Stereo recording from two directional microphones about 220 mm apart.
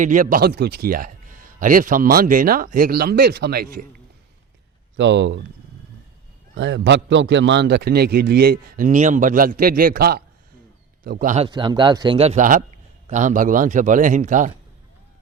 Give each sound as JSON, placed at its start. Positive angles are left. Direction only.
{"t": 0.0, "sound": "speech", "side_deg": -35}
{"t": 4.9, "sound": "speech", "side_deg": -55}
{"t": 6.5, "sound": "a man's voice", "side_deg": -55}
{"t": 11.4, "sound": "speech", "side_deg": -20}